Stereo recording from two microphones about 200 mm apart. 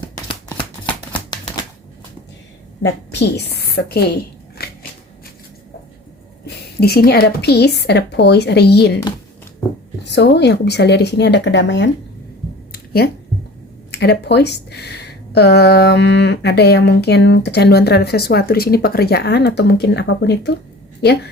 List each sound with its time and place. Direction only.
0.3 s shuffling cards: 20° left (ahead or behind)
2.8 s speech: 60° left (ahead or behind)
6.4 s speech: 55° left (ahead or behind)
10.0 s speech: 60° left (ahead or behind)
12.7 s a sound: 50° left (ahead or behind)
13.9 s speech: 55° left (ahead or behind)